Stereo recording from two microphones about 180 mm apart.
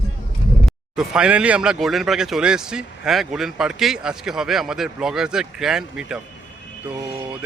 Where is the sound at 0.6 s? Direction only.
5° right (ahead or behind).